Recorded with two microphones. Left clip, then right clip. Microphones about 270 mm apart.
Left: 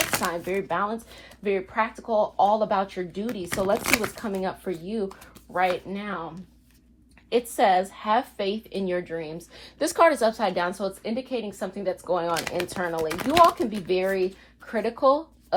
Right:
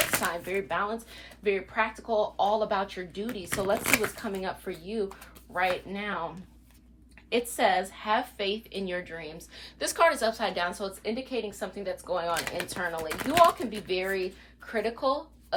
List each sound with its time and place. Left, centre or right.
0.0 s a woman's voice: centre
7.3 s a woman's voice: centre